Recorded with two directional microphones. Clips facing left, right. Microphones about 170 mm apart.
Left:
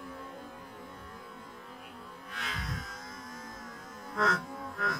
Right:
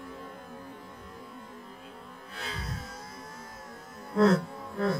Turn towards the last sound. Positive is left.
turn(degrees=-30)  # may be behind; listen again after turning